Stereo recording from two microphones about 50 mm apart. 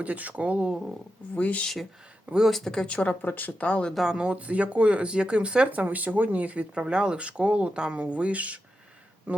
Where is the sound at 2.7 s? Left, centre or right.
Left.